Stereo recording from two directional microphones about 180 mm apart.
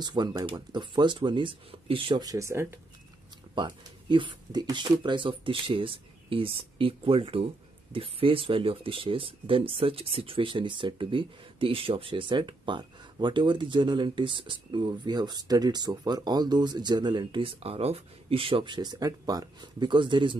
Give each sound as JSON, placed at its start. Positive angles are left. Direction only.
{"t": 0.0, "sound": "speech", "side_deg": -25}
{"t": 3.5, "sound": "speech", "side_deg": -25}